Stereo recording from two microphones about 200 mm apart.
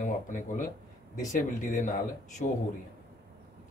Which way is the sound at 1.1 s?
40° left (ahead or behind).